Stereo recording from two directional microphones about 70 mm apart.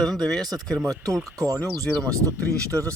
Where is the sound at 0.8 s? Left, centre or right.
Right.